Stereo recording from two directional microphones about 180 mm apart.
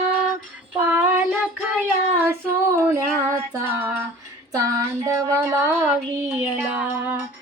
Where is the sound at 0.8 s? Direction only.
5° right (ahead or behind).